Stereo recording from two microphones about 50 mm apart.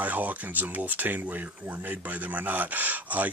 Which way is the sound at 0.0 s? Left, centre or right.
Right.